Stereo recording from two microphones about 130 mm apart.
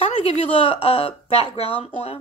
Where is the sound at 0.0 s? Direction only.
50° left (ahead or behind).